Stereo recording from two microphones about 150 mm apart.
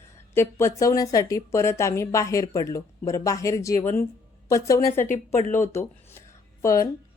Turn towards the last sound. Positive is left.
turn(degrees=20)  # may be behind; listen again after turning